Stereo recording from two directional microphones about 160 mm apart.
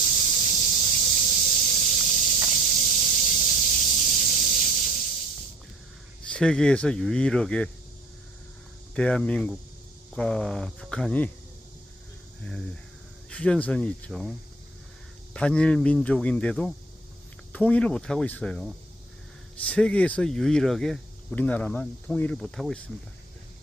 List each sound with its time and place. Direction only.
0.0 s snake: 45° left (ahead or behind)
4.3 s a sound: 50° left (ahead or behind)
6.3 s speech: 5° left (ahead or behind)
9.0 s speech: 5° left (ahead or behind)
13.3 s speech: 5° left (ahead or behind)